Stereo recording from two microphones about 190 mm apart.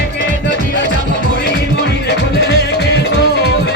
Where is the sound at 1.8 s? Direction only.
60° left (ahead or behind).